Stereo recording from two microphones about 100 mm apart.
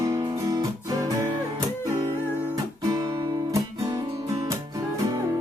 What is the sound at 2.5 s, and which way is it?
Music, 40° right (ahead or behind).